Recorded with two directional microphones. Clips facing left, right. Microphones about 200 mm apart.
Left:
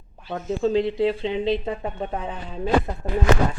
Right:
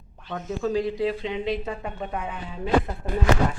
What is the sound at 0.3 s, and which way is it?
Speech, 30° left (ahead or behind).